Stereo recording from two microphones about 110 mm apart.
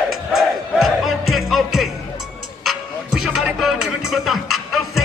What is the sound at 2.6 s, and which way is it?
Music, 5° right (ahead or behind).